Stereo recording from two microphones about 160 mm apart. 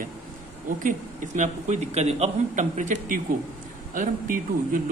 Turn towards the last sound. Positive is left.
turn(degrees=-55)  # may be behind; listen again after turning